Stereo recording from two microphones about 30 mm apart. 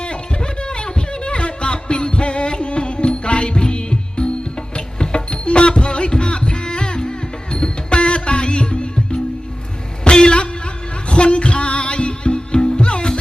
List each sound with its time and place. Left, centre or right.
0.0 s music: left
10.0 s a sound: left
11.1 s music: left